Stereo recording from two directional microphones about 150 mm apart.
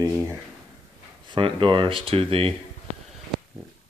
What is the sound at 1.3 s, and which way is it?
Speech, 35° right (ahead or behind).